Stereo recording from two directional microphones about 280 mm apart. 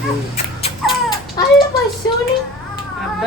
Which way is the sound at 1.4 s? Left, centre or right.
Centre.